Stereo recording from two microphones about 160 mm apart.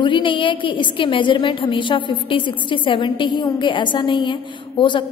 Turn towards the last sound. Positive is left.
turn(degrees=30)  # may be behind; listen again after turning